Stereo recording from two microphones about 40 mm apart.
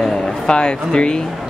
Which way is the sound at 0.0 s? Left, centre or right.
Left.